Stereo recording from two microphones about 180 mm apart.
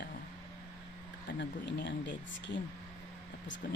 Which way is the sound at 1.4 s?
80° left.